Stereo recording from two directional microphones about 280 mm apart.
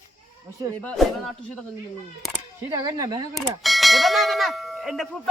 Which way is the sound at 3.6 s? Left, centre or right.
Centre.